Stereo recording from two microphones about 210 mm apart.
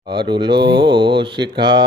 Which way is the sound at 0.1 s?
20° right (ahead or behind).